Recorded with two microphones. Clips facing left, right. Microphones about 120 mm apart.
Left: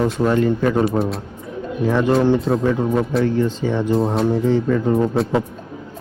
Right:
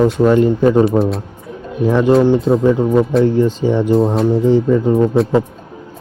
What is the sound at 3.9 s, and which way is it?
Speech, centre (ahead or behind).